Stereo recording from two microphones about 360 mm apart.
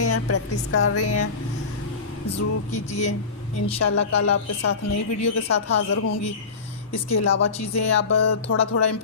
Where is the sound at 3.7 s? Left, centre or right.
Left.